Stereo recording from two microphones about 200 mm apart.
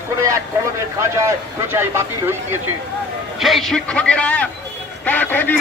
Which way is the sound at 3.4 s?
Centre (ahead or behind).